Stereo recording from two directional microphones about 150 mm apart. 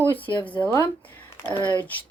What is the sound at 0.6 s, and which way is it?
Speech, 15° left (ahead or behind).